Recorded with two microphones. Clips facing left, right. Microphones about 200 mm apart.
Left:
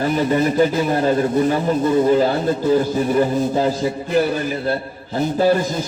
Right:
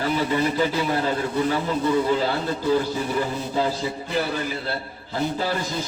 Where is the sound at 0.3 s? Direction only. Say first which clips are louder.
Left 6 dB; 45° left (ahead or behind).